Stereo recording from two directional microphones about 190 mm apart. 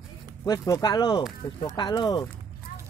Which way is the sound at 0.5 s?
20° left (ahead or behind).